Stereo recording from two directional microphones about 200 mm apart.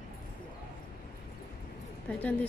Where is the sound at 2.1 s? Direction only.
5° left (ahead or behind).